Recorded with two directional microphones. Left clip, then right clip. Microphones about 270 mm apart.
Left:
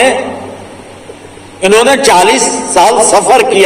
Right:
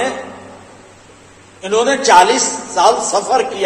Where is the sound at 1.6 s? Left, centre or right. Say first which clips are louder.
Left 8 dB; left.